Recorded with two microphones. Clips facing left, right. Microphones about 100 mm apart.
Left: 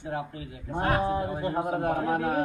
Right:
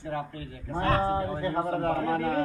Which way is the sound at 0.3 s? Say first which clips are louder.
Even; 25° left (ahead or behind).